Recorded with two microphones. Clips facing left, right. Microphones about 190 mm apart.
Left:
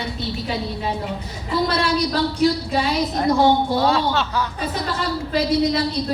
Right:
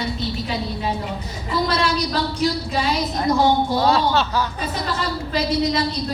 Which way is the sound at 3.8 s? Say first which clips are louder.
Right 1 dB; 35° right (ahead or behind).